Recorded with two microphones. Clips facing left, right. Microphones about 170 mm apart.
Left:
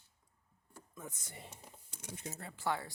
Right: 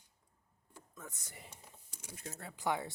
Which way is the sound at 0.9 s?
15° left (ahead or behind).